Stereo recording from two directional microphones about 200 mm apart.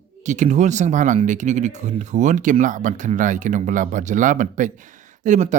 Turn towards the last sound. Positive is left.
turn(degrees=-35)  # may be behind; listen again after turning